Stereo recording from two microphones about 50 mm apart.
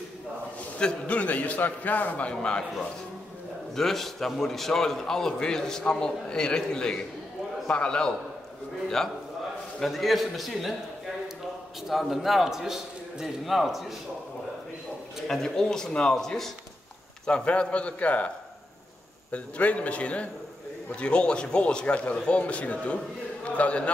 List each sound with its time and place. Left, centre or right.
0.7 s a man's voice: left
3.7 s a man's voice: centre
8.8 s a man's voice: centre
11.9 s a man's voice: centre
15.2 s a man's voice: centre
17.3 s a man's voice: left
19.3 s a man's voice: left